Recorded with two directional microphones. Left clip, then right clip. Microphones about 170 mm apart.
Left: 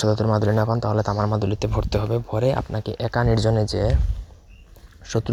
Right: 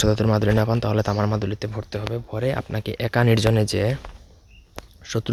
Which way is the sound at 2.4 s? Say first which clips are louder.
Left 3 dB; 5° left (ahead or behind).